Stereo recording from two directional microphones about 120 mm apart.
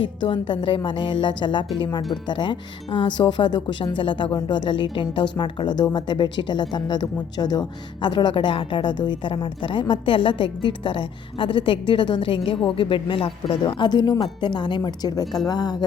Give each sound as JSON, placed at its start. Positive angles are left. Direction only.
{"t": 0.2, "sound": "a woman's voice", "side_deg": 45}